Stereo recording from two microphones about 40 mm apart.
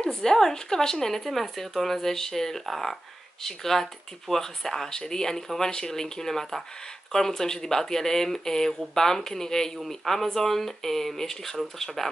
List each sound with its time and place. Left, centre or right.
0.0 s speech: centre